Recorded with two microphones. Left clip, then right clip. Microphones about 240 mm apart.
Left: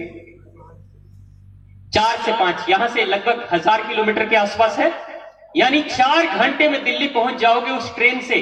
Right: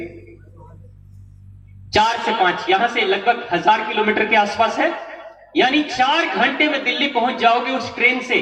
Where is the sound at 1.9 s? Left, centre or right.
Left.